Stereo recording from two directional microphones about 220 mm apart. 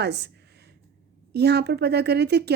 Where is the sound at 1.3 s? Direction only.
50° right (ahead or behind).